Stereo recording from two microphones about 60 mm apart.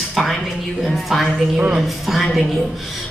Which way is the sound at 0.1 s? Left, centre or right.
Centre.